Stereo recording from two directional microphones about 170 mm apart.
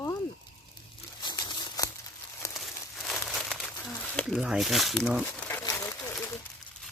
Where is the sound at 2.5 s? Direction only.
Centre (ahead or behind).